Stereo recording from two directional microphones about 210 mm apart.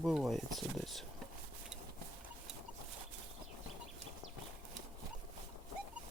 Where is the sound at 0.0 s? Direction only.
Centre (ahead or behind).